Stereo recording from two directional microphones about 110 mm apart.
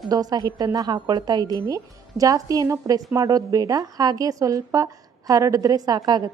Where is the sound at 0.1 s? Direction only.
35° right (ahead or behind).